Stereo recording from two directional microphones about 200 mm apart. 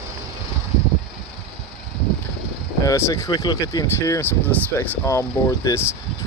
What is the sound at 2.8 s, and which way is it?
Speech, 15° left (ahead or behind).